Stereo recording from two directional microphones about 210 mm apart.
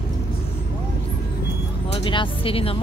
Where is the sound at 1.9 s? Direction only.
25° left (ahead or behind).